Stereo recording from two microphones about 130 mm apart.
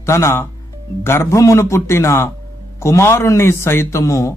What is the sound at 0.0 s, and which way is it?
A man's voice, 20° left (ahead or behind).